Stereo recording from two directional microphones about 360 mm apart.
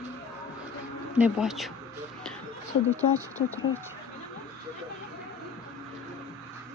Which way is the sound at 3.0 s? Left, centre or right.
Centre.